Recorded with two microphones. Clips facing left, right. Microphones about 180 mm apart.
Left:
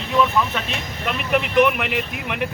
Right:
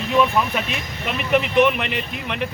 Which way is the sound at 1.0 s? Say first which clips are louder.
Right 2 dB; centre (ahead or behind).